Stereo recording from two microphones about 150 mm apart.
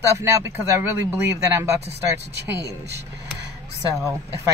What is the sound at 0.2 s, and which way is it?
Speech, 20° right (ahead or behind).